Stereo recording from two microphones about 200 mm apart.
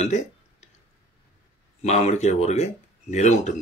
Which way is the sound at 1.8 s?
35° left (ahead or behind).